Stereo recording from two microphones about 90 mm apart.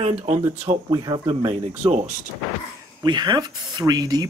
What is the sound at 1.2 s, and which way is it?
Speech, 70° right (ahead or behind).